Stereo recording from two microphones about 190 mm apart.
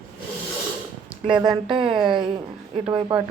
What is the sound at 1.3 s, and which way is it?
Speech, 25° right (ahead or behind).